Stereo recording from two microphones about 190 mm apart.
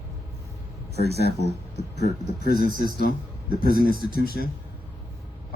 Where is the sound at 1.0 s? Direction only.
60° left (ahead or behind).